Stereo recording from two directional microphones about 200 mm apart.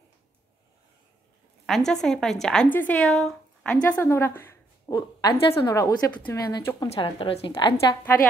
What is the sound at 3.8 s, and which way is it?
A woman's voice, 10° left (ahead or behind).